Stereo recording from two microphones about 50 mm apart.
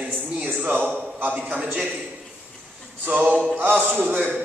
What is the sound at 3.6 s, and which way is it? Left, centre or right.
Speech, right.